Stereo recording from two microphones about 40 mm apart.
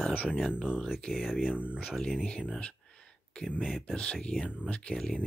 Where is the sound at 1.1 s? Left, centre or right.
Centre.